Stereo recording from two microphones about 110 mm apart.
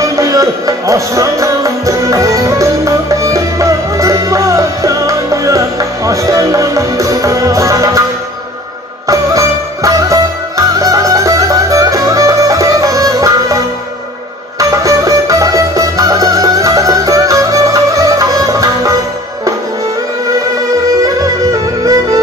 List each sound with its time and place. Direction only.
0.0 s music: 30° right (ahead or behind)
9.0 s music: 30° right (ahead or behind)
14.6 s music: 30° right (ahead or behind)
21.0 s music: 35° right (ahead or behind)